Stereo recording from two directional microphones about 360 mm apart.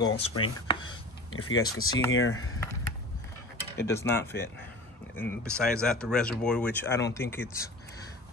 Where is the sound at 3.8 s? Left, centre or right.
Centre.